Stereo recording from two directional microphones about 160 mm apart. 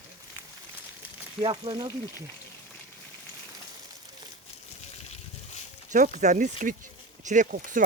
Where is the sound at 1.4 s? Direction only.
35° right (ahead or behind).